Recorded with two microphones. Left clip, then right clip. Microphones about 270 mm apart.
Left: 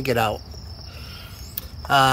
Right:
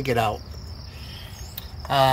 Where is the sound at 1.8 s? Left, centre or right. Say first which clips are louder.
Left 2 dB; left.